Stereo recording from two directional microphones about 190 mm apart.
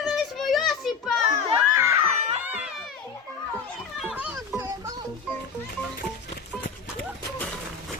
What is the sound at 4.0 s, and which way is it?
Music, 5° right (ahead or behind).